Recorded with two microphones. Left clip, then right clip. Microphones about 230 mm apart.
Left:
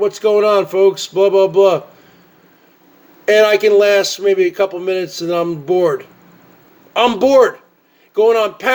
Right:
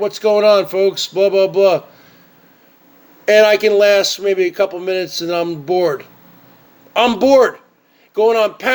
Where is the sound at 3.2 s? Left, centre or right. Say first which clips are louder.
Even; right.